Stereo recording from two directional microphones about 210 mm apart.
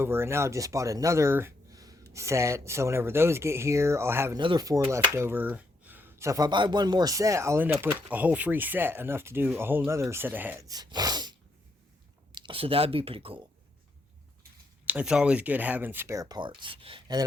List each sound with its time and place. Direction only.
0.0 s speech: 10° right (ahead or behind)
14.8 s speech: 5° right (ahead or behind); by 17.2 s 20° right (ahead or behind)